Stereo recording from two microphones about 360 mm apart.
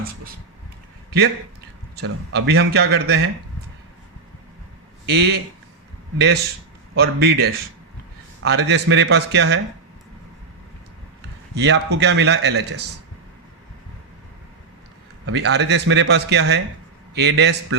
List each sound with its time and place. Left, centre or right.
2.0 s a man's voice: right
5.0 s a man's voice: right
11.5 s a man's voice: right
15.3 s a man's voice: right